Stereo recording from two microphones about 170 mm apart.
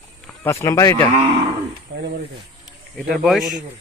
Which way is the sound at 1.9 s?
90° right.